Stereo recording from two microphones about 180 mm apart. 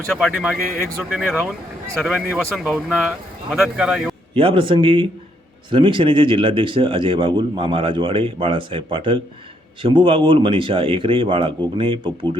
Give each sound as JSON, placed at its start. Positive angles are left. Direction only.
{"t": 0.1, "sound": "speech", "side_deg": 0}
{"t": 4.4, "sound": "speech", "side_deg": -30}